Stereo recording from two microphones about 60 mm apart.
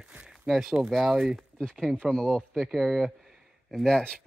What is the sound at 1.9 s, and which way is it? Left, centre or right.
Speech, centre.